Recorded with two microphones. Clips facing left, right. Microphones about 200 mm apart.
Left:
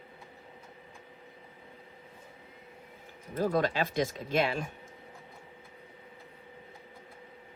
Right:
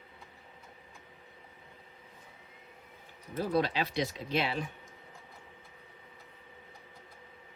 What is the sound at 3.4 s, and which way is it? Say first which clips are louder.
Speech: left 2 dB; 45° left (ahead or behind).